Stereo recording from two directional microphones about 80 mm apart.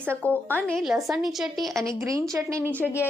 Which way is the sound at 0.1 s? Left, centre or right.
Centre.